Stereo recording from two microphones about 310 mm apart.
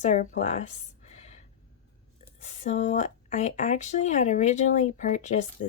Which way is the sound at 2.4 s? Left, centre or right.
Left.